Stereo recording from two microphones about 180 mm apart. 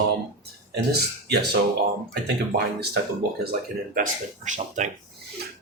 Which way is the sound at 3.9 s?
45° right (ahead or behind).